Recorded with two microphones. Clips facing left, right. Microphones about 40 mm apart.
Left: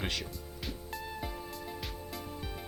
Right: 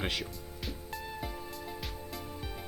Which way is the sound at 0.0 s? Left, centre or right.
Centre.